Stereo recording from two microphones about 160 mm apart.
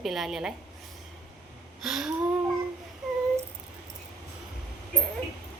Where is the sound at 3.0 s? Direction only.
Centre (ahead or behind).